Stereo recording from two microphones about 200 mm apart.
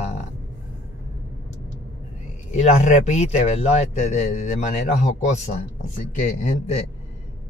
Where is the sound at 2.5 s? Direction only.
35° left (ahead or behind).